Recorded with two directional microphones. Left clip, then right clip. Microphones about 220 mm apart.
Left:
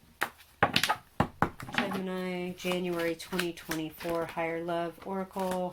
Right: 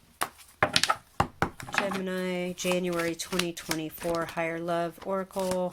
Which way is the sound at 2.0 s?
40° right (ahead or behind).